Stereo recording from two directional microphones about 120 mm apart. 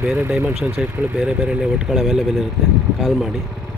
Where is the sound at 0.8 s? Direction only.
5° right (ahead or behind).